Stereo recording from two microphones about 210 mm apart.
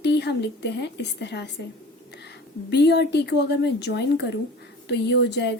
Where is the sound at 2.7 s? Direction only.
55° left (ahead or behind).